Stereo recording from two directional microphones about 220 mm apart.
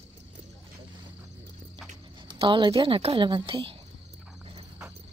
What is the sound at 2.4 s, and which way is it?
A woman's voice, 25° right (ahead or behind).